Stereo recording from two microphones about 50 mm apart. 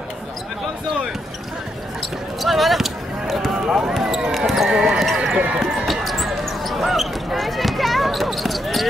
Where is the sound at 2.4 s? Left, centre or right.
Centre.